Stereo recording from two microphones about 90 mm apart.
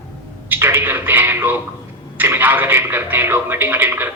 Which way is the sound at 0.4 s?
25° right (ahead or behind).